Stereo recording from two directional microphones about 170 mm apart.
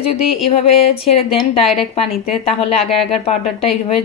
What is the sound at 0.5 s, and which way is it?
A woman's voice, 35° left (ahead or behind).